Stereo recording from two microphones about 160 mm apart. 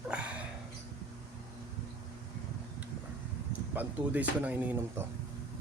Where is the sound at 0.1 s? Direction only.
10° right (ahead or behind).